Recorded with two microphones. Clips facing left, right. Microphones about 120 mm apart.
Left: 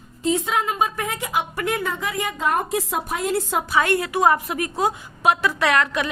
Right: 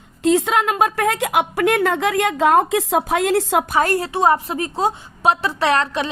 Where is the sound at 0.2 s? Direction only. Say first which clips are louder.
Right 5 dB; 90° right.